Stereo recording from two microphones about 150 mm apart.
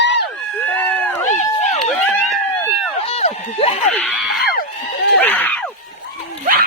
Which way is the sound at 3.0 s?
40° left (ahead or behind).